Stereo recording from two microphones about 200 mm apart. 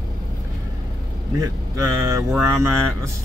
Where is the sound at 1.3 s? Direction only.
15° right (ahead or behind).